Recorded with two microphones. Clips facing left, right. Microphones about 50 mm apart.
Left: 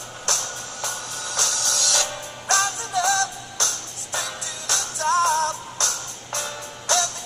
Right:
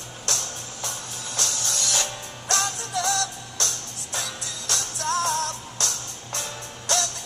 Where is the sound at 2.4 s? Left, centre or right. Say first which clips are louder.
Left 4 dB; left.